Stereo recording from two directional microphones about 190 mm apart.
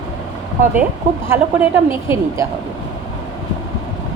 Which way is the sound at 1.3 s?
10° right (ahead or behind).